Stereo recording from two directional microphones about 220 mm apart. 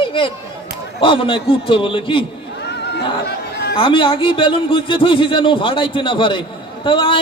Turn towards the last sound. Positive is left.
turn(degrees=25)  # may be behind; listen again after turning